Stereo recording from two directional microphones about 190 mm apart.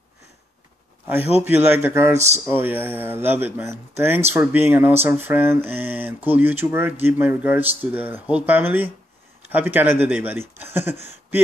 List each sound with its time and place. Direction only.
1.4 s speech: 10° right (ahead or behind)
2.1 s speech: 35° right (ahead or behind)
2.4 s speech: 10° right (ahead or behind)